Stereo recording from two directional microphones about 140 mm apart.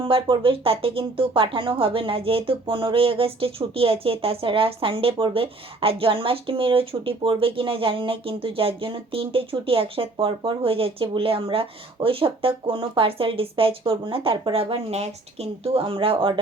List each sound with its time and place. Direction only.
0.0 s speech: 40° right (ahead or behind)